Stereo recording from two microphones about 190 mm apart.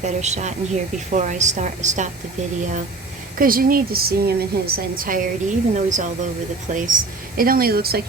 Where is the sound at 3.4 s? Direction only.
50° right (ahead or behind).